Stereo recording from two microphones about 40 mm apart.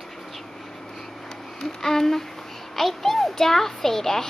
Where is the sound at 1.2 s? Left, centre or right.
Centre.